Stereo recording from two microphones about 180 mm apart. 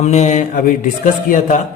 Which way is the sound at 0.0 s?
40° left (ahead or behind).